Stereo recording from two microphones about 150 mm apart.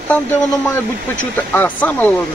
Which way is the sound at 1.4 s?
10° left (ahead or behind).